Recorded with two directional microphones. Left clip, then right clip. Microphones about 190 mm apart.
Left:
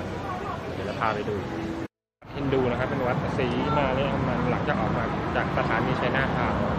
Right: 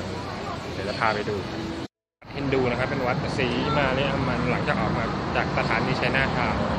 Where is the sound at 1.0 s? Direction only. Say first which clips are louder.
Right 3 dB; 10° right (ahead or behind).